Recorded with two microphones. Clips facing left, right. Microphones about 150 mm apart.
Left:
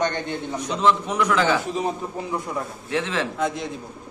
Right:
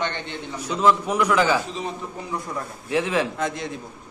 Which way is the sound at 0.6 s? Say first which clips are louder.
Right 2 dB; 5° right (ahead or behind).